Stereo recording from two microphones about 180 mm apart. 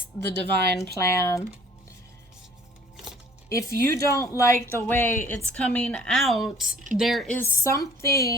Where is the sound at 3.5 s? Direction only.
15° left (ahead or behind); by 7.3 s centre (ahead or behind).